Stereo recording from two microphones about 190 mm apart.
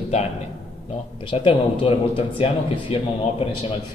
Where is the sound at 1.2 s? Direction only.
25° left (ahead or behind).